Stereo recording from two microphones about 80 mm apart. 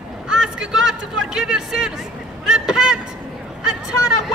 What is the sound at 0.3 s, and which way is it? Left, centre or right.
Speech, centre.